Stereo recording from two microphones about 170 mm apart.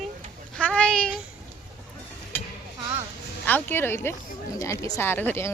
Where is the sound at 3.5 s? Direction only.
10° left (ahead or behind).